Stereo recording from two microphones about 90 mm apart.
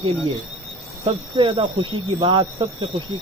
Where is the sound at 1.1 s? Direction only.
75° right (ahead or behind).